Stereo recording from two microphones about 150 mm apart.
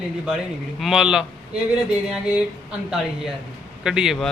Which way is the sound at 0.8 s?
5° right (ahead or behind).